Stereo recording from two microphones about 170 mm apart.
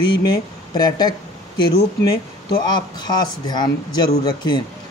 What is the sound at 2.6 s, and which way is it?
A man's voice, 25° left (ahead or behind).